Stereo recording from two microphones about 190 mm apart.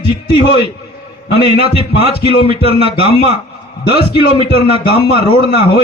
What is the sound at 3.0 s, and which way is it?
Speech, 30° left (ahead or behind).